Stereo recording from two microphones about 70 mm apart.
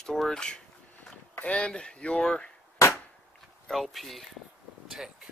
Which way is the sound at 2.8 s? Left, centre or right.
Left.